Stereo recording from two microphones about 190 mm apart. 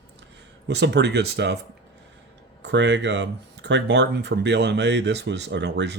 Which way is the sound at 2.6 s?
70° right (ahead or behind).